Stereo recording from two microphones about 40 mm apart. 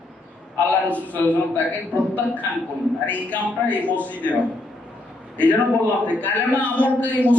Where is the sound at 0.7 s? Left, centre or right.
Left.